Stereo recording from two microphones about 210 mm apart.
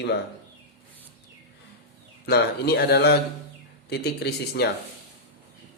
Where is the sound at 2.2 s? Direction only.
50° left (ahead or behind).